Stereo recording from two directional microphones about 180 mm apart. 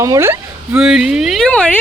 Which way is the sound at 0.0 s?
15° right (ahead or behind).